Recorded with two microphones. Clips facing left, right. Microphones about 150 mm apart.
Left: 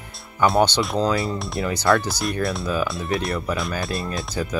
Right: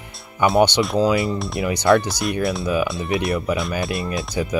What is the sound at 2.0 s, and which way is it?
Speech, 10° left (ahead or behind).